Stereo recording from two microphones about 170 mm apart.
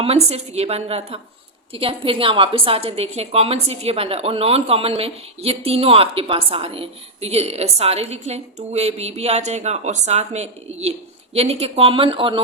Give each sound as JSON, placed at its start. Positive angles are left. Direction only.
{"t": 0.0, "sound": "a woman's voice", "side_deg": -35}